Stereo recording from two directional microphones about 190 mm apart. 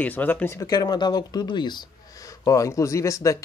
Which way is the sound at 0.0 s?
10° left (ahead or behind).